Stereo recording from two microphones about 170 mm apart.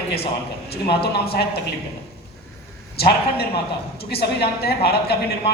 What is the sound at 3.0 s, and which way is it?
A woman's voice, 70° left (ahead or behind).